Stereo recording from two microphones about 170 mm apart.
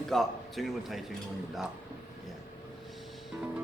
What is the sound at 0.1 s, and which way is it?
Speech, centre (ahead or behind).